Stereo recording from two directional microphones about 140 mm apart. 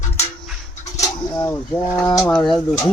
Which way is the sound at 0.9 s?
20° left (ahead or behind).